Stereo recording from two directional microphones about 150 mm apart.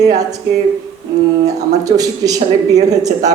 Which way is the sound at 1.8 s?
25° right (ahead or behind).